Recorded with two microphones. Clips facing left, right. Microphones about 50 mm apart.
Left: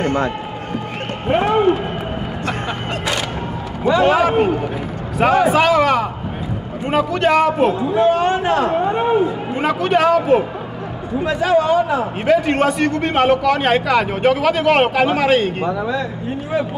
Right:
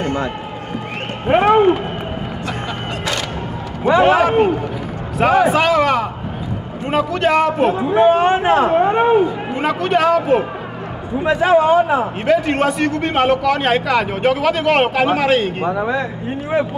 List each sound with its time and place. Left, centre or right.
0.0 s run: left
1.3 s a man's voice: right
4.0 s a man's voice: centre
7.7 s a man's voice: right
8.7 s a man's voice: right
9.6 s a man's voice: centre
11.2 s a man's voice: right
12.3 s a man's voice: centre
15.7 s a man's voice: right